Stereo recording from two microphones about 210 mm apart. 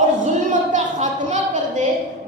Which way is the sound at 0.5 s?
35° right (ahead or behind).